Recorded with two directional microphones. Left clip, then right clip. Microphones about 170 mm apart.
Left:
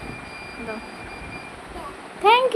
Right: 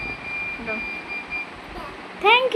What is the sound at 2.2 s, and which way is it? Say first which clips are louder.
Speech: left 1 dB; centre (ahead or behind).